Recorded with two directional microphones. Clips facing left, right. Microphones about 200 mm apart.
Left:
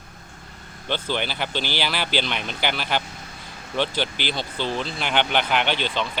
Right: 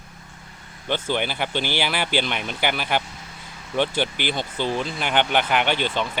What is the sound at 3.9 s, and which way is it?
Speech, 50° right (ahead or behind).